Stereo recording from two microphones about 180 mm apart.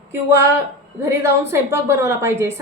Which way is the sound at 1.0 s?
15° right (ahead or behind).